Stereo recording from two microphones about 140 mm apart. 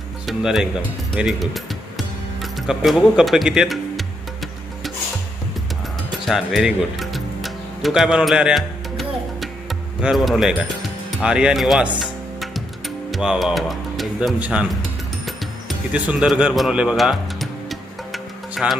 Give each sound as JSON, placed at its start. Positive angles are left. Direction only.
{"t": 0.3, "sound": "speech", "side_deg": -5}
{"t": 6.1, "sound": "music", "side_deg": 0}
{"t": 11.2, "sound": "speech", "side_deg": -5}
{"t": 14.3, "sound": "speech", "side_deg": -10}
{"t": 15.9, "sound": "music", "side_deg": -10}